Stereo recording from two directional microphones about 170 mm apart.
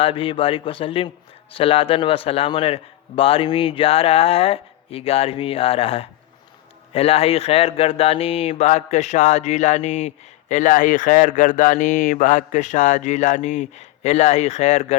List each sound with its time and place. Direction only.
0.0 s a man's voice: 30° left (ahead or behind)